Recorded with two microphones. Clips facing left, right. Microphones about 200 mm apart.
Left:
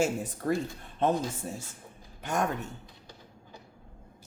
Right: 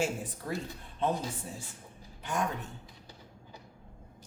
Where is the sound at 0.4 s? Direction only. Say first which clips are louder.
Left 8 dB; 50° left (ahead or behind).